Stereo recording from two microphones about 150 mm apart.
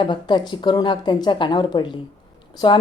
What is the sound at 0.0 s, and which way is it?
Speech, 30° left (ahead or behind).